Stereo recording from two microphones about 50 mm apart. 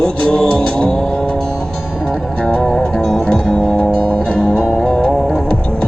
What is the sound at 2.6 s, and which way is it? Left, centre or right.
Music, centre.